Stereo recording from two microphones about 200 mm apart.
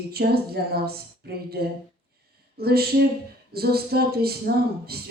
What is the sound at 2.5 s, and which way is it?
Speech, 50° right (ahead or behind).